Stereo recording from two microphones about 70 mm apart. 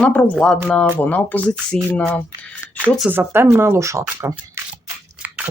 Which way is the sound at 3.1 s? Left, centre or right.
Right.